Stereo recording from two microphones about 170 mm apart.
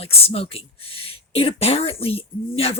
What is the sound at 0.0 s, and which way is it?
Speech, 35° left (ahead or behind).